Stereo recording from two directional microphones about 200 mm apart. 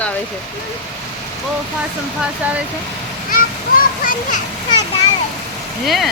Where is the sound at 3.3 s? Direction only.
45° left (ahead or behind).